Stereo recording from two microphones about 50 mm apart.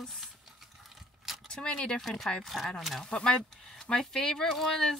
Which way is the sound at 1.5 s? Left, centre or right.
Centre.